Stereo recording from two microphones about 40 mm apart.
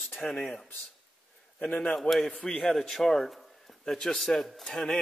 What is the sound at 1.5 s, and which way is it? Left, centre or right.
A man's voice, left.